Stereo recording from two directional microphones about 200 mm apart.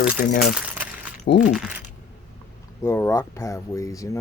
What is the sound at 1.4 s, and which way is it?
Speech, 5° right (ahead or behind).